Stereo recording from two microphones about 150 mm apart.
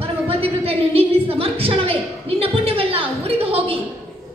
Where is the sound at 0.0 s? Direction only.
40° right (ahead or behind).